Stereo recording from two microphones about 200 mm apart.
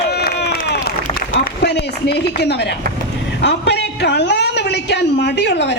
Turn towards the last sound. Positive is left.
turn(degrees=60)  # may be behind; listen again after turning